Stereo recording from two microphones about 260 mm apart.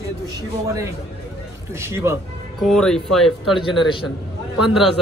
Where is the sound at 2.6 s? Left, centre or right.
Centre.